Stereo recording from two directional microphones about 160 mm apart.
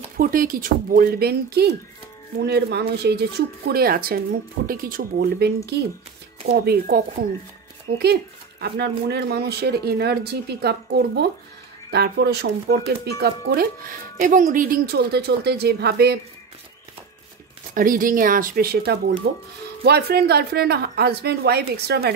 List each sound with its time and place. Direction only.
0.2 s speech: 65° right (ahead or behind); by 7.0 s 80° right
8.0 s speech: 90° right
14.2 s speech: 55° right (ahead or behind); by 16.2 s 85° right
17.7 s speech: 60° right (ahead or behind)
19.2 s speech: 90° right